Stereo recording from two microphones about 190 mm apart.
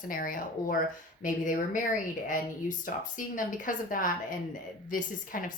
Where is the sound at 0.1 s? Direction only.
45° left (ahead or behind).